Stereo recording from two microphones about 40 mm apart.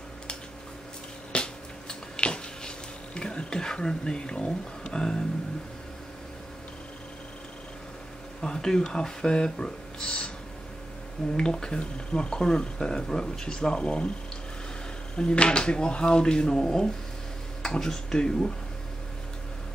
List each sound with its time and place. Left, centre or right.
1.3 s a sound: left
3.2 s speech: left
8.4 s speech: centre
11.3 s speech: centre
15.1 s speech: left